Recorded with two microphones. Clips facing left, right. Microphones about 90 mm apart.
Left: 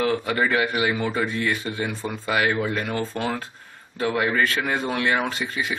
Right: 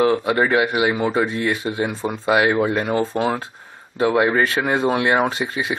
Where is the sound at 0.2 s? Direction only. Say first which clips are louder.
Right 4 dB; 25° right (ahead or behind).